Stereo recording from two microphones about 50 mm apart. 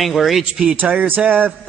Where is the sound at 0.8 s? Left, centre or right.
Right.